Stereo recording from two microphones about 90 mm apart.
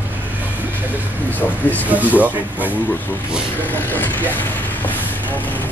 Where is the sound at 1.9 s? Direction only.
20° right (ahead or behind).